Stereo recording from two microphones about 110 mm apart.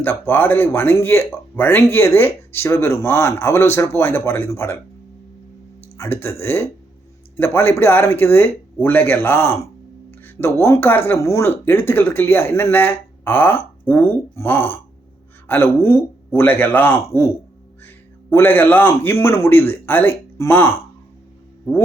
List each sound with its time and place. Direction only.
0.0 s speech: 20° left (ahead or behind)
6.0 s a man's voice: 20° left (ahead or behind)